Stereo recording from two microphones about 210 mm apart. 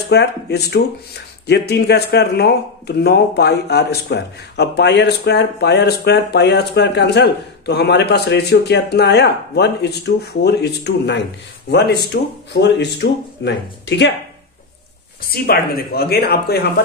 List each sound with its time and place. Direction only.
0.1 s speech: 50° left (ahead or behind)
15.2 s speech: 45° left (ahead or behind)